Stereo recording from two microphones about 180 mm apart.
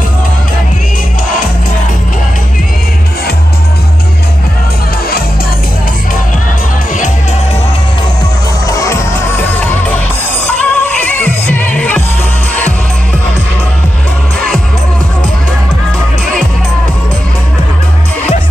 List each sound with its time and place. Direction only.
8.6 s music: 15° left (ahead or behind)
10.4 s music: 10° left (ahead or behind)